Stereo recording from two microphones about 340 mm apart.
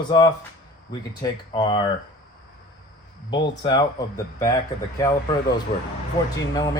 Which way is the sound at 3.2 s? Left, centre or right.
Centre.